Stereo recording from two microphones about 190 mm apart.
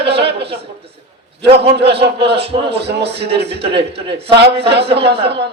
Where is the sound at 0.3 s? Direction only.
30° right (ahead or behind).